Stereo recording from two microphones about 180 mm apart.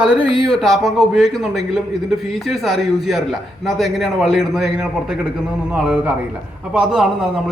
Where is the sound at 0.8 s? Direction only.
Centre (ahead or behind).